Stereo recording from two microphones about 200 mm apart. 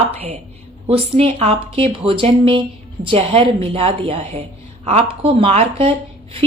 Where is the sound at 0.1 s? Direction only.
30° right (ahead or behind).